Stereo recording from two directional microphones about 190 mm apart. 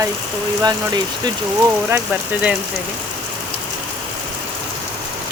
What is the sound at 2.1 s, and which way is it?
Speech, 10° right (ahead or behind).